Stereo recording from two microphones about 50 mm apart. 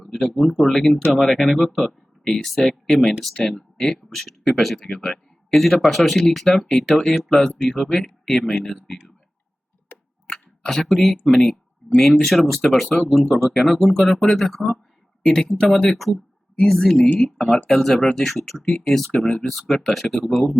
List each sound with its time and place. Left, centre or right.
0.1 s speech: centre
9.9 s tick: left
10.2 s speech: centre
11.8 s a sound: centre
12.2 s speech: centre
15.2 s speech: centre
15.4 s speech: centre